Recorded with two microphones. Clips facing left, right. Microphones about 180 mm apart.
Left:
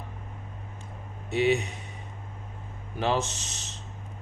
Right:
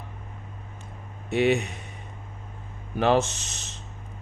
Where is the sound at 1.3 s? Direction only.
55° right (ahead or behind).